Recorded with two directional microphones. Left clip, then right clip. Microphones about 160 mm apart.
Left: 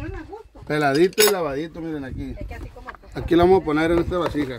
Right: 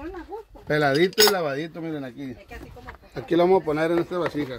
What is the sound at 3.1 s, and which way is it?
Speech, 70° left (ahead or behind).